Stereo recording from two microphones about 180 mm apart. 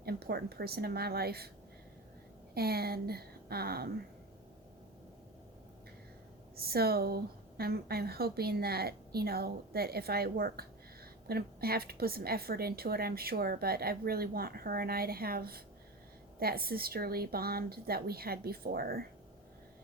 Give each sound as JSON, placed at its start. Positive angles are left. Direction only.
{"t": 0.0, "sound": "a woman's voice", "side_deg": -60}
{"t": 2.6, "sound": "a woman's voice", "side_deg": -60}
{"t": 6.6, "sound": "a woman's voice", "side_deg": -60}